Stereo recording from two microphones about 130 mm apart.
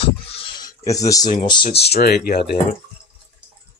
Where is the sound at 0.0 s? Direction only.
45° left (ahead or behind).